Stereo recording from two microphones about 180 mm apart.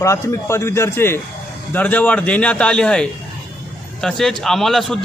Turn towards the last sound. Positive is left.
turn(degrees=0)  # may be behind; listen again after turning